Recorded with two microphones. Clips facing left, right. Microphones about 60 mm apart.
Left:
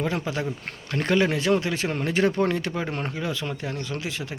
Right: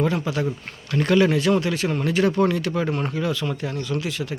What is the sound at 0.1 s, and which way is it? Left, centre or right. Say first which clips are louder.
Speech: right 3 dB; left.